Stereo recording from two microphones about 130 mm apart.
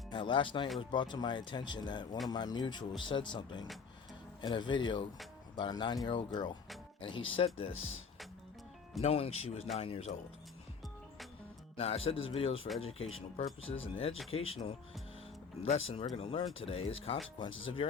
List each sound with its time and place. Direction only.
0.1 s speech: 40° left (ahead or behind)
9.0 s speech: 50° left (ahead or behind)
11.8 s speech: 50° left (ahead or behind)
15.7 s speech: 45° left (ahead or behind)